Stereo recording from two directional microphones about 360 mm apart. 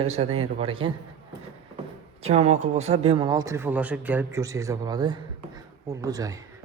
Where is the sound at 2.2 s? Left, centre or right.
Centre.